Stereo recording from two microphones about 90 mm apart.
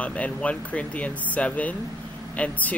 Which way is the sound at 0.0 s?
15° left (ahead or behind).